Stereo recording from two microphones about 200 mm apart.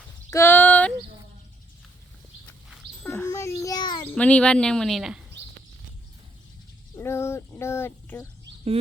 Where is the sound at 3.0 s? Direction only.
10° left (ahead or behind).